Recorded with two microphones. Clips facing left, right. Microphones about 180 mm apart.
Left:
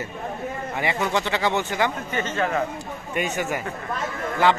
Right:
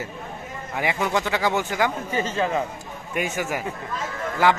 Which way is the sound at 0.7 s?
10° right (ahead or behind).